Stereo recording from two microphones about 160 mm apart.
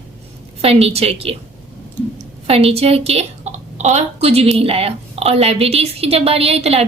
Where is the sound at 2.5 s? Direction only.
40° right (ahead or behind).